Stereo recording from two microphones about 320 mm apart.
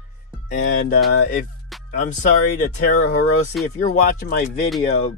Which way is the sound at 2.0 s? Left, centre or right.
Left.